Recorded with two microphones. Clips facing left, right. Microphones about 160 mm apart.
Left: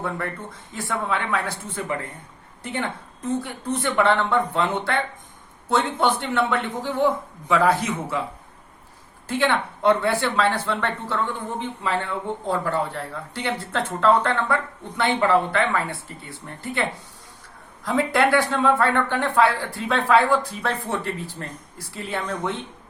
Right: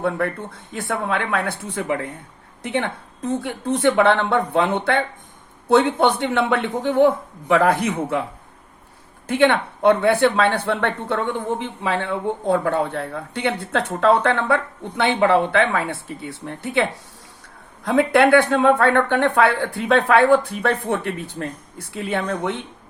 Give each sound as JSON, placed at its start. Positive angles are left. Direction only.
{"t": 0.7, "sound": "speech", "side_deg": -65}
{"t": 9.2, "sound": "speech", "side_deg": -60}
{"t": 17.8, "sound": "speech", "side_deg": -65}